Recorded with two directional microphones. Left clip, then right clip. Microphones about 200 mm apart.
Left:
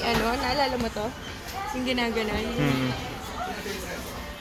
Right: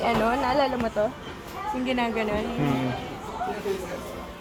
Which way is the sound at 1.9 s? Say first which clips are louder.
Right 1 dB; 20° right (ahead or behind).